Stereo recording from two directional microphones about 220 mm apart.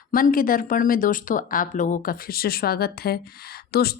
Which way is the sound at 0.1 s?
40° left (ahead or behind).